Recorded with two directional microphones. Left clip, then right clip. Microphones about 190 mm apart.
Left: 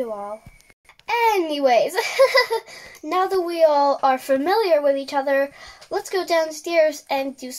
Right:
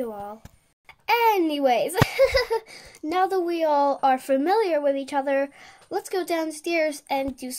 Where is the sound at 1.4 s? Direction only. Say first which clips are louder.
Left 4 dB; 20° right (ahead or behind).